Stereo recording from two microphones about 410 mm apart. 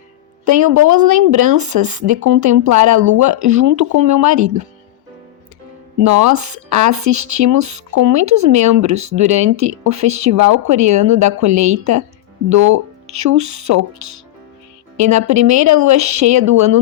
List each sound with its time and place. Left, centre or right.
0.4 s speech: right
6.0 s a woman's voice: right